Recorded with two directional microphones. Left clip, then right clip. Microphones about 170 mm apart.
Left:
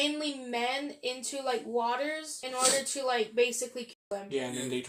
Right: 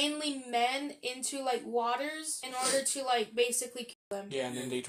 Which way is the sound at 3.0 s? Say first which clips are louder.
Left 3 dB; 40° right (ahead or behind).